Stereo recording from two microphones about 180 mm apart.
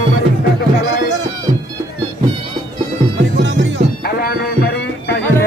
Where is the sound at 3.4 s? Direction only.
85° right.